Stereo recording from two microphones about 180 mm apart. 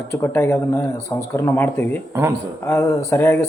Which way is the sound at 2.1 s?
10° right (ahead or behind).